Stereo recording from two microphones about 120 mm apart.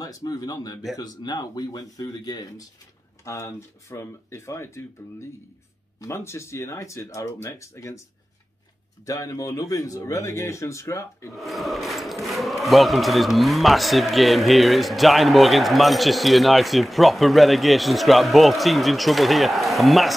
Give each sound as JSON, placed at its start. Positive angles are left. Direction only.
{"t": 0.0, "sound": "speech", "side_deg": 30}
{"t": 3.3, "sound": "speech", "side_deg": 25}
{"t": 5.9, "sound": "speech", "side_deg": 25}
{"t": 9.0, "sound": "speech", "side_deg": 30}
{"t": 11.3, "sound": "a man's voice", "side_deg": 0}